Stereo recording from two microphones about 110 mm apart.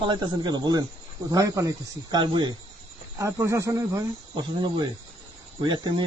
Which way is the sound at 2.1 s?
45° right (ahead or behind).